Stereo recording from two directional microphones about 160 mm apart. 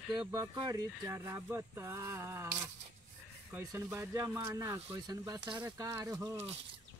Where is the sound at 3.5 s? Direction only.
15° right (ahead or behind).